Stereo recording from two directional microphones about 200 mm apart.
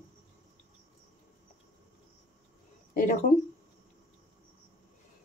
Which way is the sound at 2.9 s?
40° left (ahead or behind).